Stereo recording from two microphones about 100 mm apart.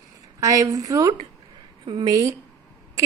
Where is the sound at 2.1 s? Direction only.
35° right (ahead or behind).